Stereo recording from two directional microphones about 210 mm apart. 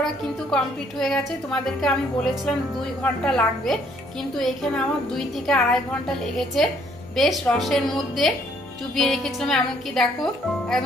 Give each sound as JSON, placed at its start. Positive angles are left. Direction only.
{"t": 0.0, "sound": "a woman's voice", "side_deg": 0}